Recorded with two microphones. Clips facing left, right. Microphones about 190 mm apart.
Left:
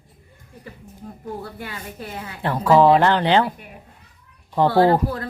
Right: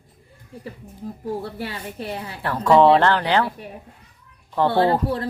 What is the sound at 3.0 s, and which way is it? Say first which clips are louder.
Speech: left 2 dB; 20° left (ahead or behind).